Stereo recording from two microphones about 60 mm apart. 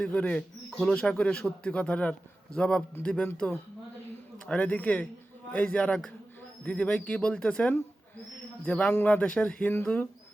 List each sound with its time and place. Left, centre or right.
0.0 s a man's voice: centre
4.4 s a man's voice: left
8.6 s a man's voice: left